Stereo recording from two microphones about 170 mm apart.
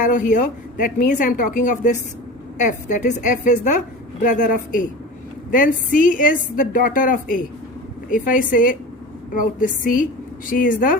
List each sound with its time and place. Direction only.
0.0 s a woman's voice: 50° left (ahead or behind)